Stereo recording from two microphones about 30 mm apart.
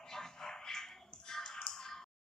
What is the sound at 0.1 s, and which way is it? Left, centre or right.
Music, centre.